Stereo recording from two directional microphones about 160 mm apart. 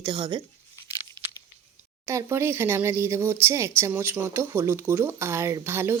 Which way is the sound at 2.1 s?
20° right (ahead or behind).